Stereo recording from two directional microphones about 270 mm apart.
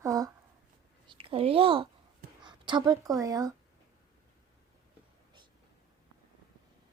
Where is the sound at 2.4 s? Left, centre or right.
Centre.